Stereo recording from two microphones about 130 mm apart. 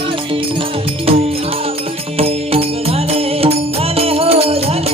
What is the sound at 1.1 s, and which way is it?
Music, 45° right (ahead or behind).